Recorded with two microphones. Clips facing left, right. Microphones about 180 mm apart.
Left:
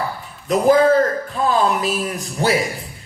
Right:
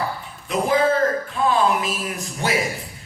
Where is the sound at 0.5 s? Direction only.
40° left (ahead or behind).